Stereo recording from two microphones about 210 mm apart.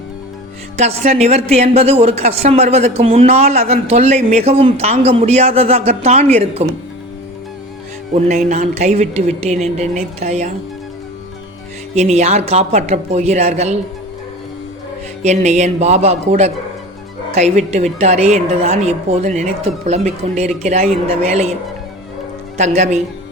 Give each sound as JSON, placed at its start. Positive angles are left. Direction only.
{"t": 0.8, "sound": "a woman's voice", "side_deg": -30}
{"t": 8.1, "sound": "a woman's voice", "side_deg": -35}
{"t": 11.9, "sound": "a woman's voice", "side_deg": -30}
{"t": 15.2, "sound": "a woman's voice", "side_deg": -35}
{"t": 22.5, "sound": "a woman's voice", "side_deg": -35}